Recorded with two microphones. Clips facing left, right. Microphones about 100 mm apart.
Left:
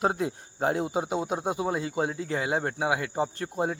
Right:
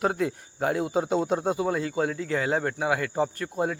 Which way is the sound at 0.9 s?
10° left (ahead or behind).